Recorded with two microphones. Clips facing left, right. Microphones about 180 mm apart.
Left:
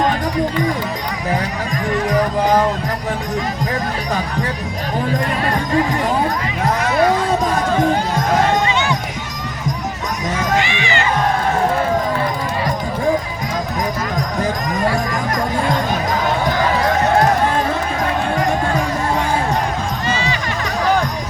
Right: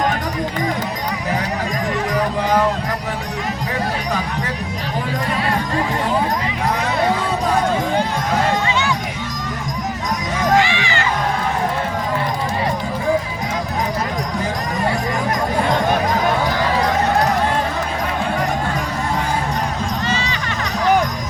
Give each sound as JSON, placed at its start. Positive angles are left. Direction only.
{"t": 10.6, "sound": "crowd", "side_deg": 20}